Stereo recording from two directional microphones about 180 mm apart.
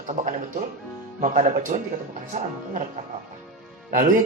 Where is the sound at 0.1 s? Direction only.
45° right (ahead or behind).